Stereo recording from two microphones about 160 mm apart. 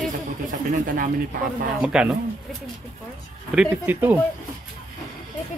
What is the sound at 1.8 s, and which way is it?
Speech, 5° right (ahead or behind).